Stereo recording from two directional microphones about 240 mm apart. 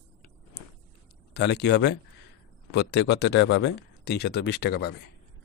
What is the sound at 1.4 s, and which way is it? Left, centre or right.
A man's voice, left.